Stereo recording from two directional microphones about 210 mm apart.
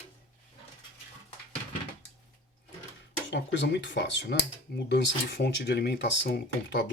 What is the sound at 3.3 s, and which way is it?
Speech, 60° left (ahead or behind).